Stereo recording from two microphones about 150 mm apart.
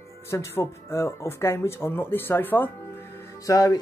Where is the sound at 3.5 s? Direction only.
25° left (ahead or behind).